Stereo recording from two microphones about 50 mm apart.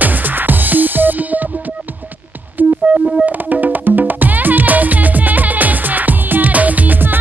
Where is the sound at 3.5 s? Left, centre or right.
Right.